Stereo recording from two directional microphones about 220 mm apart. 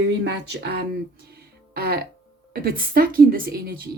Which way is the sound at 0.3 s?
50° right (ahead or behind).